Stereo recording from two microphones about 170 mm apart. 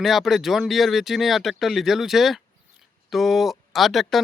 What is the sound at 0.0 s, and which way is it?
Speech, centre (ahead or behind).